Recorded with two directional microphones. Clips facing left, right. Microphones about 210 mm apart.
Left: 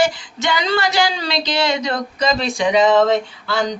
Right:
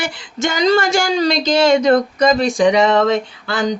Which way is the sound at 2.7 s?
70° right (ahead or behind).